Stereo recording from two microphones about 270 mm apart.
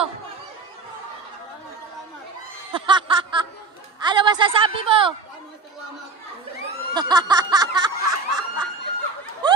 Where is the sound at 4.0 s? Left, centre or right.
Centre.